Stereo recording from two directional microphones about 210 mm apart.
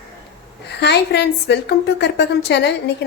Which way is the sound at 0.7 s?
55° left (ahead or behind).